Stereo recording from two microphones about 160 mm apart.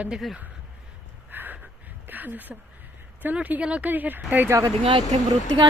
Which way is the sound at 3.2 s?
10° right (ahead or behind).